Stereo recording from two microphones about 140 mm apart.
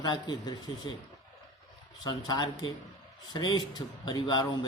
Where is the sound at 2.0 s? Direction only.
30° left (ahead or behind).